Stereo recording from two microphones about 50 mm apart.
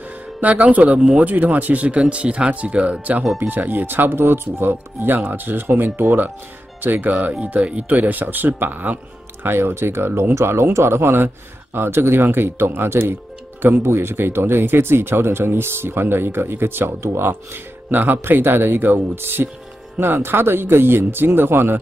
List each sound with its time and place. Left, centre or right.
0.4 s speech: right
3.3 s speech: right
9.4 s speech: right
17.9 s speech: right